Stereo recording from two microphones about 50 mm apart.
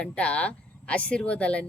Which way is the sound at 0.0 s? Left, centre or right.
Left.